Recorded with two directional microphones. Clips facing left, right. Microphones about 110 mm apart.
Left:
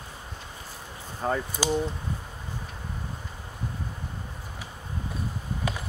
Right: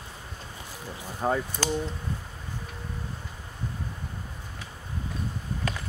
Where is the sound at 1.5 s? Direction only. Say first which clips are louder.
Left 2 dB; 10° left (ahead or behind).